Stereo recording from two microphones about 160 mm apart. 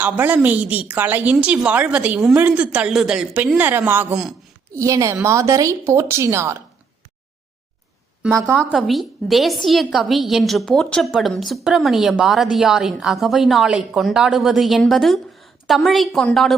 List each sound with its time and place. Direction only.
0.0 s a woman's voice: 10° right (ahead or behind)
4.7 s a woman's voice: 20° right (ahead or behind)
8.5 s a woman's voice: centre (ahead or behind)